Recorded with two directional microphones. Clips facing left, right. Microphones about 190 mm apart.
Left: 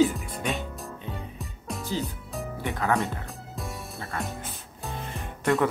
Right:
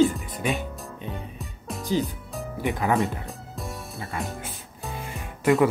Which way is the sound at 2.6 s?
15° right (ahead or behind).